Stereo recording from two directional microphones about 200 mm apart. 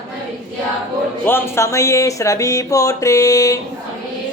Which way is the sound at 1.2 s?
10° left (ahead or behind).